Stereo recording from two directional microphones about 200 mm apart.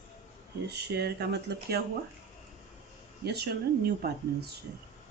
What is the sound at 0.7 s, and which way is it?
Speech, 55° right (ahead or behind).